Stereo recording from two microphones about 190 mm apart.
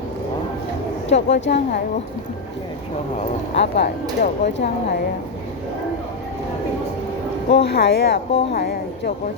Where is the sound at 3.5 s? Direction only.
65° left (ahead or behind).